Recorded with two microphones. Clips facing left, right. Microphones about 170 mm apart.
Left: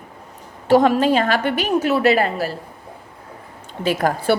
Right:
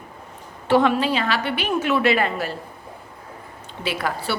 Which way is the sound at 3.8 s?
45° left (ahead or behind).